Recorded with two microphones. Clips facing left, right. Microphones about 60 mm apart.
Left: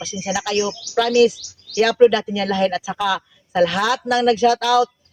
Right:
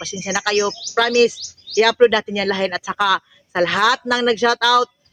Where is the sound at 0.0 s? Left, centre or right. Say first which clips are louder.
Right 2 dB; right.